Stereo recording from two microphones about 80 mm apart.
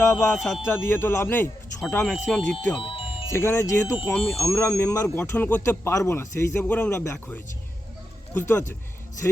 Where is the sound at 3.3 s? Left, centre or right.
Left.